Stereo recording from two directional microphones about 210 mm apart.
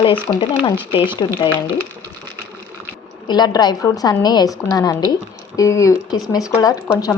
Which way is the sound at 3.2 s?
20° left (ahead or behind).